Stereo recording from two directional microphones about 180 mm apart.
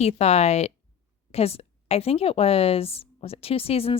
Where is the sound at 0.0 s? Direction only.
35° left (ahead or behind).